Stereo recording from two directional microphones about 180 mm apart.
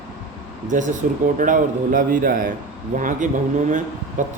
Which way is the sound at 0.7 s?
45° right (ahead or behind).